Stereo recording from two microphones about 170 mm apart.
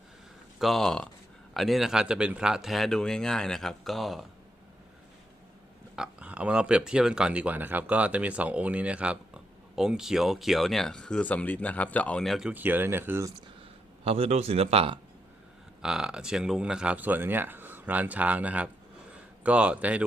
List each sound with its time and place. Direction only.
0.6 s speech: centre (ahead or behind)
6.0 s speech: 5° right (ahead or behind)
14.0 s speech: 35° right (ahead or behind)
15.8 s speech: 5° right (ahead or behind)